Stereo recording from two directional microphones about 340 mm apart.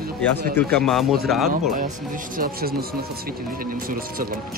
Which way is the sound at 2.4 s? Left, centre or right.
Right.